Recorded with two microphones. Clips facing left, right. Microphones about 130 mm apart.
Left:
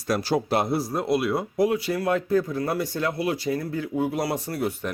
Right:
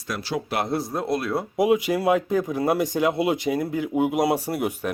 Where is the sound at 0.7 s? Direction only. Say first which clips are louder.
Left 1 dB; 5° left (ahead or behind).